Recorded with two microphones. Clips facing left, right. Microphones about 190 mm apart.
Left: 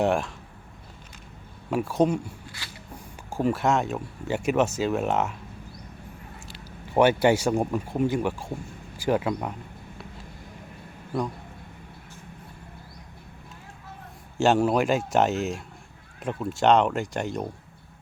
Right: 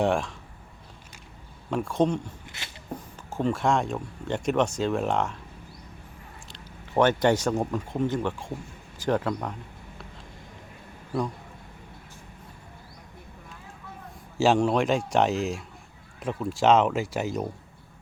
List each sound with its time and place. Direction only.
0.0 s speech: centre (ahead or behind)
1.7 s speech: 5° left (ahead or behind)
2.6 s a sound: 25° right (ahead or behind)
3.2 s speech: 10° left (ahead or behind)
6.5 s speech: 10° left (ahead or behind)
14.3 s speech: centre (ahead or behind)